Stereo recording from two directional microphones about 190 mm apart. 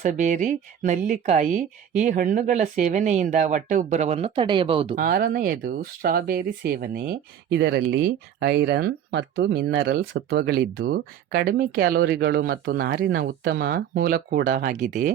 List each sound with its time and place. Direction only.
0.0 s speech: 40° right (ahead or behind)
4.9 s speech: 50° right (ahead or behind)